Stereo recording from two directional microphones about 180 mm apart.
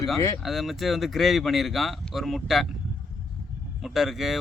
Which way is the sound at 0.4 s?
Centre (ahead or behind).